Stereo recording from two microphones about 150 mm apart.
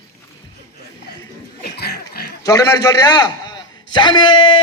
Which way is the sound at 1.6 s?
90° left.